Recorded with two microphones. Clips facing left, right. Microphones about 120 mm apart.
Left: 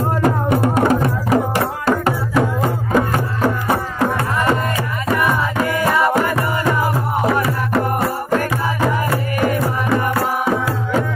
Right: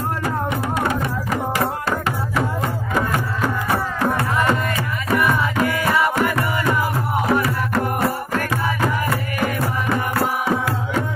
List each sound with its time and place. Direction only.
0.2 s music: 50° left (ahead or behind)
3.6 s music: 20° left (ahead or behind)
5.7 s music: 15° left (ahead or behind)